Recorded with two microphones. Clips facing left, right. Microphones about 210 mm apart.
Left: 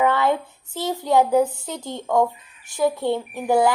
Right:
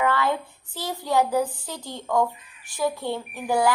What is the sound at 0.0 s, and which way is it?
Speech, 20° left (ahead or behind).